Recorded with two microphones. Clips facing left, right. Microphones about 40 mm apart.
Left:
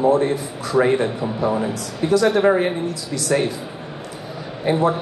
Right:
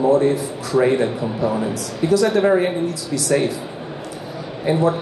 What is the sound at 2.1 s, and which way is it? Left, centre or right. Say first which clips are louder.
A man's voice: even; left.